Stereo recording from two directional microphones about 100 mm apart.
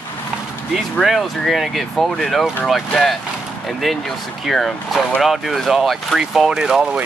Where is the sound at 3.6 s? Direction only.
Centre (ahead or behind).